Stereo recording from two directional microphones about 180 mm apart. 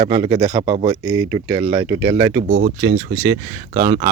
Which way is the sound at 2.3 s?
65° right (ahead or behind).